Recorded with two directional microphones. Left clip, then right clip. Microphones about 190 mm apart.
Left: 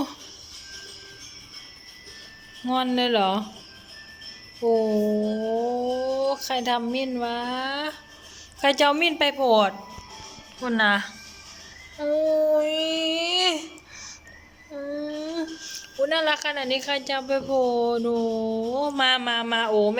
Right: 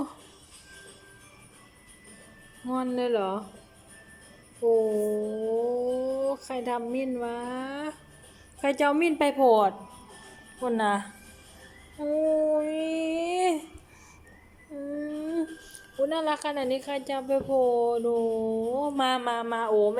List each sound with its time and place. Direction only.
2.7 s speech: 5° right (ahead or behind)
4.6 s speech: 15° left (ahead or behind)
6.2 s a woman's voice: 10° right (ahead or behind)
10.6 s a woman's voice: 10° right (ahead or behind)
11.9 s child singing: 10° right (ahead or behind)
12.5 s a sound: 10° right (ahead or behind)
14.8 s child singing: 5° right (ahead or behind)
16.0 s a woman's voice: 15° right (ahead or behind)
17.5 s speech: 15° left (ahead or behind)
17.8 s a woman's voice: 10° right (ahead or behind)